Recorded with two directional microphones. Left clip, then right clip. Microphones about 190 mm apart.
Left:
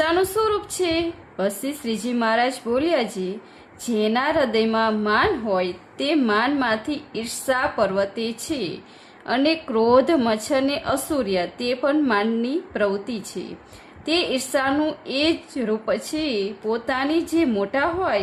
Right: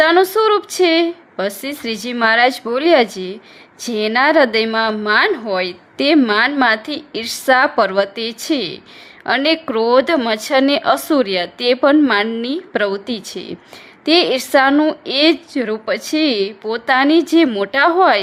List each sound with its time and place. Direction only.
0.0 s a woman's voice: 30° right (ahead or behind)